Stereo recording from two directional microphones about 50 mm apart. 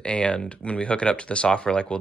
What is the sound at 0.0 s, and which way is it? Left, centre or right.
Speech, left.